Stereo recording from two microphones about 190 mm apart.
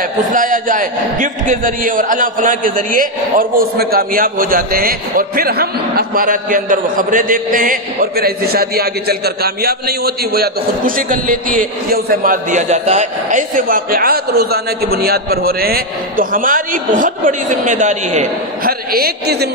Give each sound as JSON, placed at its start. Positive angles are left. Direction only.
{"t": 0.3, "sound": "a man's voice", "side_deg": -45}